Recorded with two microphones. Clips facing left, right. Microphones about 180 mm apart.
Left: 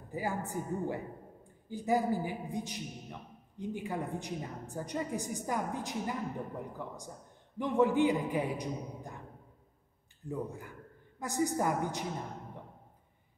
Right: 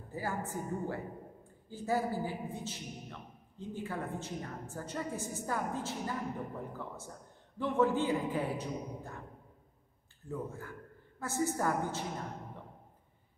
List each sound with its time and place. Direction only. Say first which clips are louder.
0.1 s a man's voice: left 2 dB; 15° left (ahead or behind)
7.5 s a man's voice: left 2 dB; 15° left (ahead or behind)
10.2 s a man's voice: left 2 dB; 15° left (ahead or behind)